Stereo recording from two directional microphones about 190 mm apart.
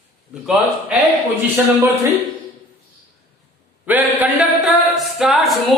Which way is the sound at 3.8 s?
10° right (ahead or behind).